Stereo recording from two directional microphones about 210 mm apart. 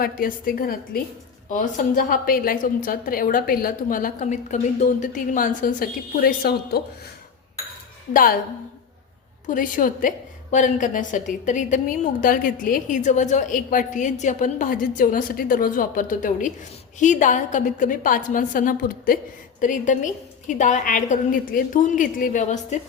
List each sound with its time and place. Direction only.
0.0 s a woman's voice: 40° left (ahead or behind)
8.1 s a woman's voice: 45° left (ahead or behind)
9.5 s a woman's voice: 40° left (ahead or behind)